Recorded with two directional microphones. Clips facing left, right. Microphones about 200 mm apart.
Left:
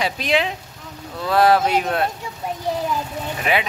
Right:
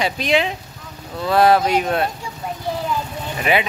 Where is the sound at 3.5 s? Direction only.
Centre (ahead or behind).